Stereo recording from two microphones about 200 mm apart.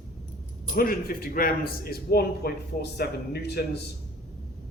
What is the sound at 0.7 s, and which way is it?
Speech, 45° left (ahead or behind).